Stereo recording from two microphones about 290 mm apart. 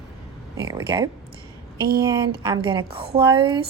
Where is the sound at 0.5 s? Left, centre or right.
Centre.